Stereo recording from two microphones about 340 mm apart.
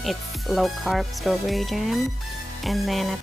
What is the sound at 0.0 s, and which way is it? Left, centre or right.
Speech, centre.